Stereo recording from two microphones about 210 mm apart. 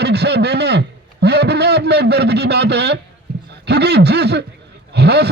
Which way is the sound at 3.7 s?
50° right (ahead or behind).